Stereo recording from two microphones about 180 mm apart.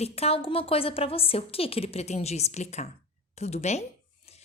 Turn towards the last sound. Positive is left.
turn(degrees=40)  # may be behind; listen again after turning